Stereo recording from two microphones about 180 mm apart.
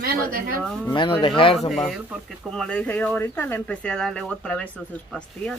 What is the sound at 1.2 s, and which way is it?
Speech, 30° left (ahead or behind).